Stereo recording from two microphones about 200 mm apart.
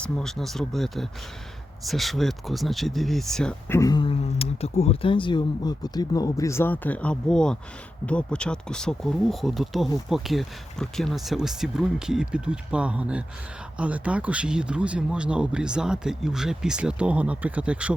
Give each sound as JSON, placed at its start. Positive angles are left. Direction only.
{"t": 0.0, "sound": "speech", "side_deg": 0}
{"t": 3.7, "sound": "speech", "side_deg": 15}